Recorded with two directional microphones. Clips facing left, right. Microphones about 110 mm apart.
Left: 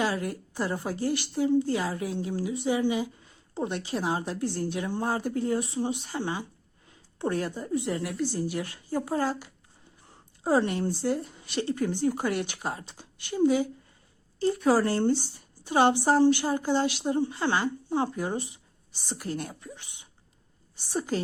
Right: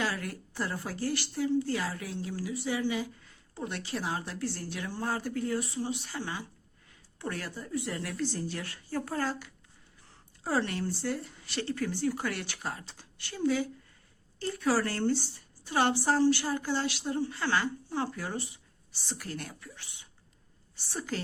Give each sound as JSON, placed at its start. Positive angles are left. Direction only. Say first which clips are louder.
{"t": 0.0, "sound": "a woman's voice", "louder": "left 5 dB", "side_deg": 20}
{"t": 21.1, "sound": "a woman's voice", "louder": "left 6 dB", "side_deg": 20}